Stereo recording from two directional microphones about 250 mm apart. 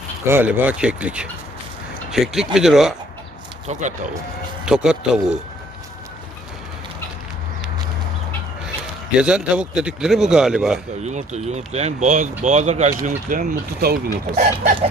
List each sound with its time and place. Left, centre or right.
0.3 s a man's voice: centre
3.7 s speech: right
4.6 s a man's voice: centre
9.1 s a man's voice: centre
11.0 s speech: right